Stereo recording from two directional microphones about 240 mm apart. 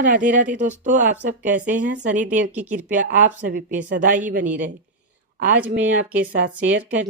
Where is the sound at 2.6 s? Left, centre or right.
Right.